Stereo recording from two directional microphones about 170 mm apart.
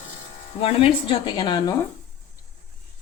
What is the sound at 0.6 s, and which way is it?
A woman's voice, 35° left (ahead or behind).